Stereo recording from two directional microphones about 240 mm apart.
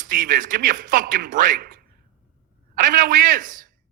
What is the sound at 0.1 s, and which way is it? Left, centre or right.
Speech, right.